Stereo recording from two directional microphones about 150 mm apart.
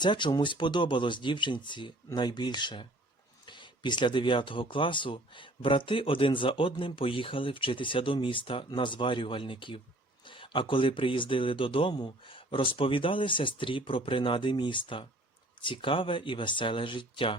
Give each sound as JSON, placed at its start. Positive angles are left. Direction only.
{"t": 0.0, "sound": "speech", "side_deg": 30}